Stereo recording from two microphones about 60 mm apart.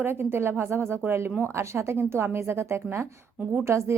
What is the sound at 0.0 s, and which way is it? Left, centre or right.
A woman's voice, right.